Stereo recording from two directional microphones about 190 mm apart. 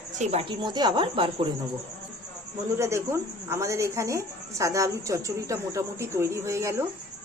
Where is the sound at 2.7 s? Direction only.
15° right (ahead or behind).